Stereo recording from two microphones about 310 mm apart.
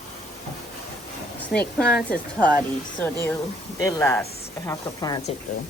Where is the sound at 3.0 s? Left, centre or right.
Centre.